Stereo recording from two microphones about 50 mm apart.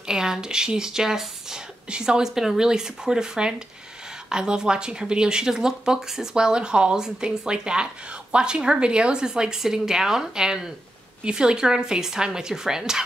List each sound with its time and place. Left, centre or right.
0.0 s speech: centre